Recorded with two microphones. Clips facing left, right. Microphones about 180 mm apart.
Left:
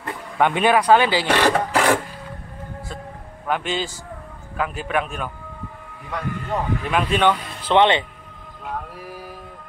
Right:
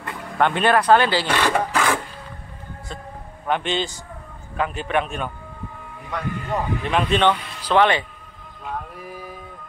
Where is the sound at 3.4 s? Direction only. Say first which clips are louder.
Right 1 dB; 5° left (ahead or behind).